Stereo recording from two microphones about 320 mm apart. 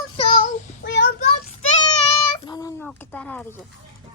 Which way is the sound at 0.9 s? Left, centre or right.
Left.